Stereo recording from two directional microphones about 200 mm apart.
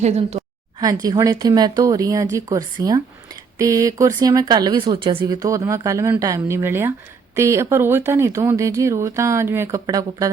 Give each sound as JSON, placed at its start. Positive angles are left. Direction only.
{"t": 0.0, "sound": "a woman's voice", "side_deg": -30}
{"t": 1.0, "sound": "speech", "side_deg": -20}